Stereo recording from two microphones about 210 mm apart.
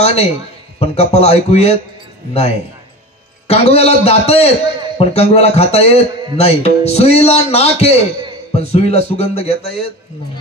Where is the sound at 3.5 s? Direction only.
30° left (ahead or behind).